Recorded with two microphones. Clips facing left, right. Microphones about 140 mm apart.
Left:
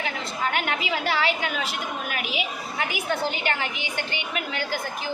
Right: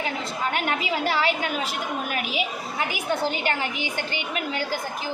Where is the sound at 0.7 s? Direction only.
40° right (ahead or behind).